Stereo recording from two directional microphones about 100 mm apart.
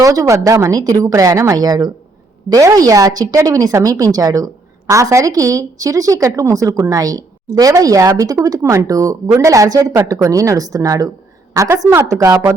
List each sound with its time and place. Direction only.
0.0 s speech: 35° right (ahead or behind)